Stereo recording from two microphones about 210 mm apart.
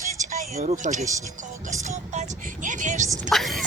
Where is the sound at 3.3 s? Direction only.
Centre (ahead or behind).